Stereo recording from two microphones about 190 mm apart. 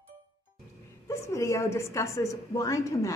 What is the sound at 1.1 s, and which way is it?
A woman's voice, 15° left (ahead or behind).